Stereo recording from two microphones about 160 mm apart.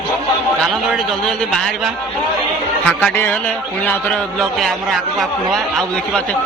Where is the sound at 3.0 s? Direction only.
10° left (ahead or behind).